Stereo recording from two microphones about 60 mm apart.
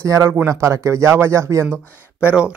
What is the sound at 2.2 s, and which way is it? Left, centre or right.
Speech, centre.